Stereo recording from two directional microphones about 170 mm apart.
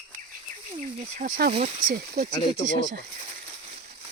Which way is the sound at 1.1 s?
50° right (ahead or behind).